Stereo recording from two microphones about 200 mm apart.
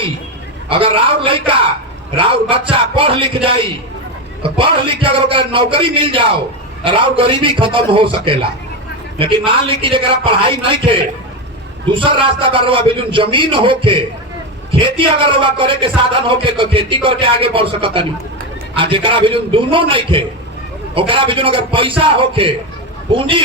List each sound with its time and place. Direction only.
0.7 s speech: 25° right (ahead or behind)
11.9 s speech: 25° right (ahead or behind)